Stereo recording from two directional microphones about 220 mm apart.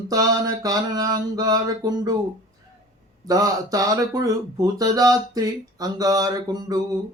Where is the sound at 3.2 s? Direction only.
15° right (ahead or behind).